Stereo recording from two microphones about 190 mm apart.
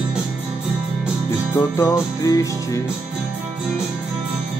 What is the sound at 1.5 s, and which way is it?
Music, 15° left (ahead or behind).